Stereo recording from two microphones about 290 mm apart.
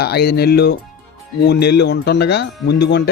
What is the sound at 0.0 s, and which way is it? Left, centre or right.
Speech, left.